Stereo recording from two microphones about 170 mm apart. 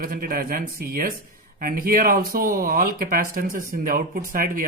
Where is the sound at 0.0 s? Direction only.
55° right (ahead or behind).